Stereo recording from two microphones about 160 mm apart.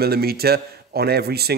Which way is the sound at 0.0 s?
75° right (ahead or behind).